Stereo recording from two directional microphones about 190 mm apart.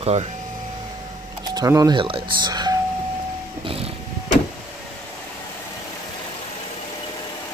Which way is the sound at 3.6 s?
30° right (ahead or behind).